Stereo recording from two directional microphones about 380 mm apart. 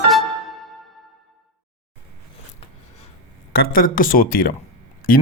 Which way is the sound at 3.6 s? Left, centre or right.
Left.